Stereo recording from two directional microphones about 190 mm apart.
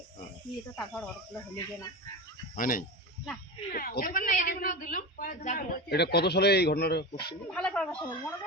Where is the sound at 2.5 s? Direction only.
45° left (ahead or behind).